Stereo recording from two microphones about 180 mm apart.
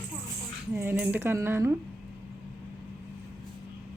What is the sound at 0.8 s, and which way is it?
Speech, 10° right (ahead or behind).